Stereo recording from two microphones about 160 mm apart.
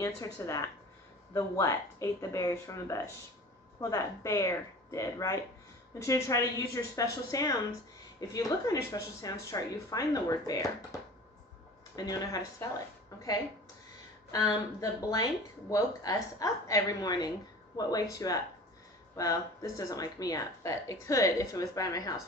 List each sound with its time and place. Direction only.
0.0 s speech: 20° left (ahead or behind)
14.3 s speech: 20° left (ahead or behind)